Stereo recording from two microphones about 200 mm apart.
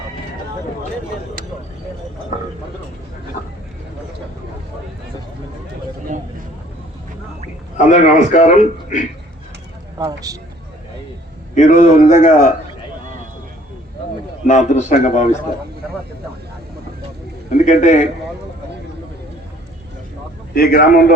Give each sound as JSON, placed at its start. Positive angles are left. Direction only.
{"t": 7.8, "sound": "a man's voice", "side_deg": 40}
{"t": 10.0, "sound": "a man's voice", "side_deg": -15}
{"t": 11.5, "sound": "a man's voice", "side_deg": 35}
{"t": 14.4, "sound": "a man's voice", "side_deg": 35}
{"t": 17.7, "sound": "a man's voice", "side_deg": 40}
{"t": 20.5, "sound": "a man's voice", "side_deg": 45}